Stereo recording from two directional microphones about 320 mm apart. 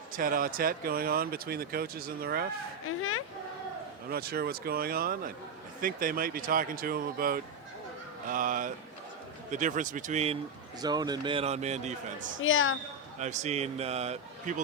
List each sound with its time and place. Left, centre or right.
0.1 s speech: right
3.0 s a woman's voice: left
4.1 s speech: right
12.4 s a woman's voice: left
13.1 s speech: right